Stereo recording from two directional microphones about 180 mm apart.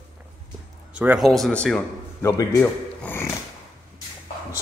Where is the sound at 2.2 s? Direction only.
20° left (ahead or behind).